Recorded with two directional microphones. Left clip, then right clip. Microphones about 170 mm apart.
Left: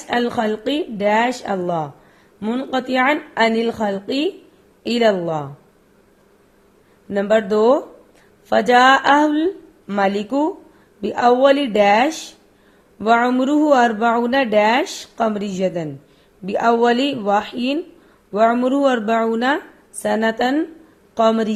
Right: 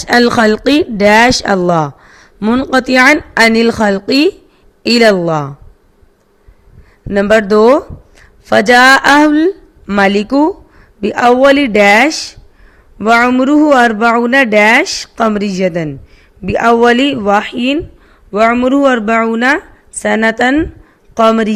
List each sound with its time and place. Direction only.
0.1 s a woman's voice: 45° right (ahead or behind)
7.1 s a woman's voice: 35° right (ahead or behind)